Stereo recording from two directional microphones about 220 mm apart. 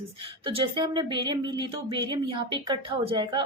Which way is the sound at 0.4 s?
20° right (ahead or behind).